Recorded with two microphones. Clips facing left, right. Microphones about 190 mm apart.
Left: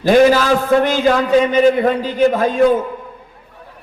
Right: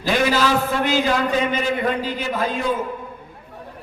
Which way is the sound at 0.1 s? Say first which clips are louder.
Left 8 dB; 50° left (ahead or behind).